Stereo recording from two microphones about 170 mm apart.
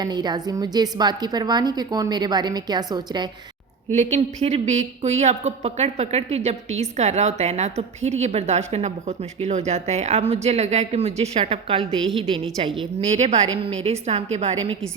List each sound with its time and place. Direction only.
0.0 s a woman's voice: 25° right (ahead or behind)
3.9 s a woman's voice: 40° right (ahead or behind)